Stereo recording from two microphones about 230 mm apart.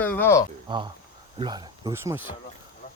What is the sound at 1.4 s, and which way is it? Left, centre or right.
Speech, centre.